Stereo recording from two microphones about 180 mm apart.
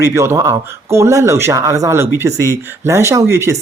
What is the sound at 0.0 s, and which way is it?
Speech, 15° right (ahead or behind).